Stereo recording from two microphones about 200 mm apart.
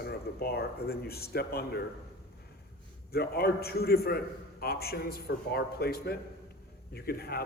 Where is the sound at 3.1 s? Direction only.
50° left (ahead or behind).